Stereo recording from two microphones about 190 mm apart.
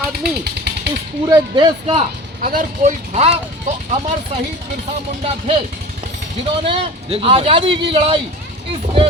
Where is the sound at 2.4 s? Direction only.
45° right (ahead or behind).